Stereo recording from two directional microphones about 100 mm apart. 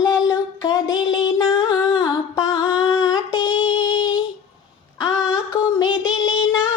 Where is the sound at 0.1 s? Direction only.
40° left (ahead or behind).